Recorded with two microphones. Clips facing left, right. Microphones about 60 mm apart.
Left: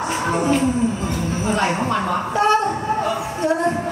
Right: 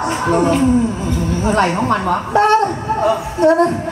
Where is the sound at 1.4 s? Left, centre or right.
Right.